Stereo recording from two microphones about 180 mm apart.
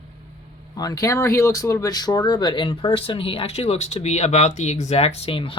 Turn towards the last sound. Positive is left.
turn(degrees=30)  # may be behind; listen again after turning